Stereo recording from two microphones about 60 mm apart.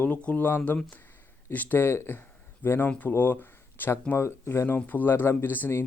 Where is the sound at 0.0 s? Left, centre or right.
Left.